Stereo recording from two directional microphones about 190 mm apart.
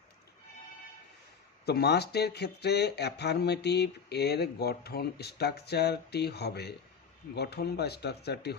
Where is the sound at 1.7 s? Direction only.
60° left (ahead or behind).